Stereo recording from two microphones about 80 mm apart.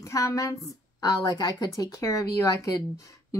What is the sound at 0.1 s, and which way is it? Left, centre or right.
Speech, left.